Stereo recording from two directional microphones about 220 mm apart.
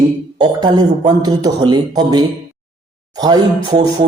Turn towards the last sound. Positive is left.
turn(degrees=-15)  # may be behind; listen again after turning